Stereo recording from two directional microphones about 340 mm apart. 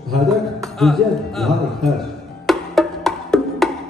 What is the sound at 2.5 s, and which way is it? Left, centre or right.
Music, centre.